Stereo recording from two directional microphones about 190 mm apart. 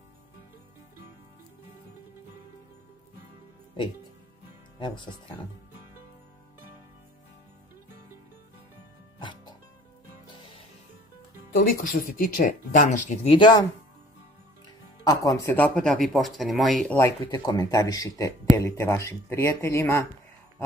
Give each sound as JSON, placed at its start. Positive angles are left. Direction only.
{"t": 4.7, "sound": "speech", "side_deg": 25}
{"t": 9.2, "sound": "music", "side_deg": 25}
{"t": 11.5, "sound": "speech", "side_deg": 45}
{"t": 15.0, "sound": "speech", "side_deg": 15}